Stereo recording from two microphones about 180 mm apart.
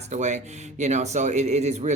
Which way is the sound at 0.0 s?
40° right (ahead or behind).